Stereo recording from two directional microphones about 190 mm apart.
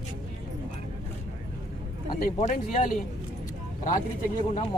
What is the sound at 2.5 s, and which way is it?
Speech, 40° left (ahead or behind).